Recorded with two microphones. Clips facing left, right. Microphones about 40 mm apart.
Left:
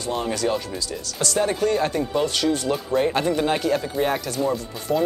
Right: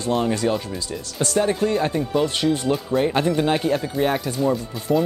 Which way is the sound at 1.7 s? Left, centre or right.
Centre.